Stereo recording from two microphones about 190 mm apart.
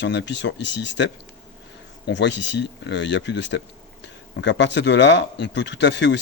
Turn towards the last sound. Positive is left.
turn(degrees=65)  # may be behind; listen again after turning